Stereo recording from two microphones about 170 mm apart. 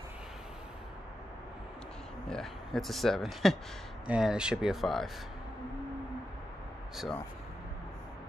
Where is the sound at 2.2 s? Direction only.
5° left (ahead or behind).